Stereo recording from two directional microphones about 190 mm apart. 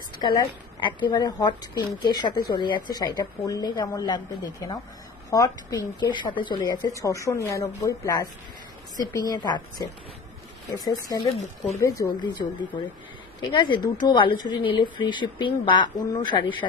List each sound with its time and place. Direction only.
0.8 s a woman's voice: 25° left (ahead or behind)